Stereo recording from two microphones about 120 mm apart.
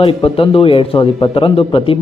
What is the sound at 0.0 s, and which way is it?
Speech, 50° left (ahead or behind).